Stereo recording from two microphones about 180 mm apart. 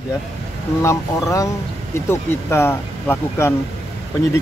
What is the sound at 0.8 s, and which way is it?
Speech, 15° left (ahead or behind).